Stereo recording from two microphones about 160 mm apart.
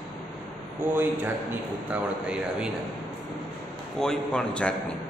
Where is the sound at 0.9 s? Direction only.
10° right (ahead or behind).